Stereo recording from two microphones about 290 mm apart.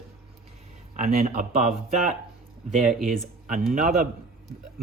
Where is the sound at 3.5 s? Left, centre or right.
Right.